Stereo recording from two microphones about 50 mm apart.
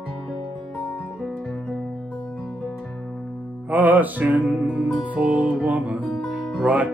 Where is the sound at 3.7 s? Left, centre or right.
Right.